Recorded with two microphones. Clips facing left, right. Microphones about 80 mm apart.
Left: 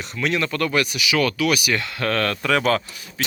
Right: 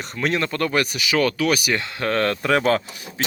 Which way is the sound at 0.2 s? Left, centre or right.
Right.